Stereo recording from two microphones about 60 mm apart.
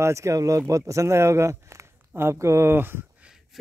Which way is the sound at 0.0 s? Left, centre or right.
Right.